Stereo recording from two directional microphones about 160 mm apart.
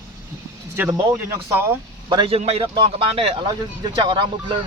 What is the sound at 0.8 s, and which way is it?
Speech, 20° right (ahead or behind).